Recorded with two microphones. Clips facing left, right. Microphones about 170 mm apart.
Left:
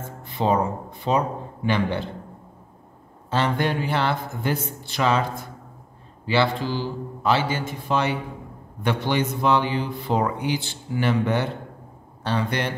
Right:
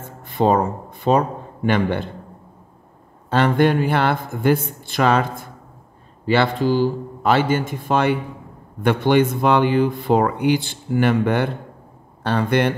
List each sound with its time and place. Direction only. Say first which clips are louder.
0.2 s a man's voice: right 5 dB; 50° right (ahead or behind)
3.3 s a man's voice: right 7 dB; 55° right (ahead or behind)